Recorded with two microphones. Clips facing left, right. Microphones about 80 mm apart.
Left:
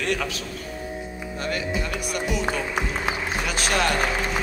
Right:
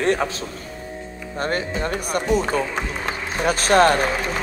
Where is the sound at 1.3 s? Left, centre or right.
Right.